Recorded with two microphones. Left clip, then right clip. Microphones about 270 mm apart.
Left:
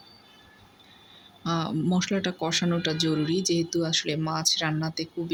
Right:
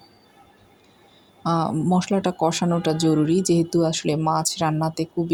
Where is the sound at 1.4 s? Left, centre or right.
Centre.